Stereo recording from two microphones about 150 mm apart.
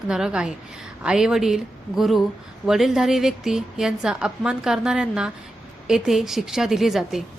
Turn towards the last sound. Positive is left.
turn(degrees=0)  # may be behind; listen again after turning